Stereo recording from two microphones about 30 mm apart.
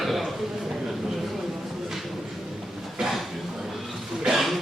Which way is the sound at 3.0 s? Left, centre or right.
Centre.